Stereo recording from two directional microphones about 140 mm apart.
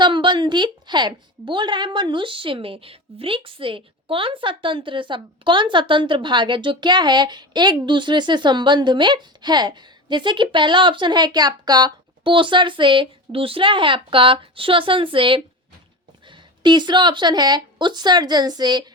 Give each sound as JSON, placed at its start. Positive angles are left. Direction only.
{"t": 0.0, "sound": "a woman's voice", "side_deg": -35}